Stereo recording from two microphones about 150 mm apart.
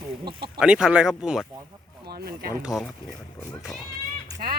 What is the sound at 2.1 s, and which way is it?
Speech, 90° right.